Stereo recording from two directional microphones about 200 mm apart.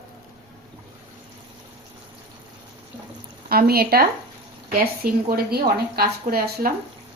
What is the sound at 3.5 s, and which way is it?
A woman's voice, 50° right (ahead or behind).